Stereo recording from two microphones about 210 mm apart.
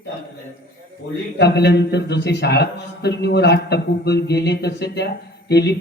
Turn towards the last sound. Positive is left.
turn(degrees=50)  # may be behind; listen again after turning